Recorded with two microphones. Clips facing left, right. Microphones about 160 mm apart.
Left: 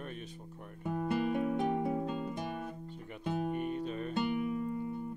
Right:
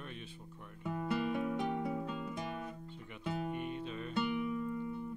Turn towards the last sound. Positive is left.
turn(degrees=40)  # may be behind; listen again after turning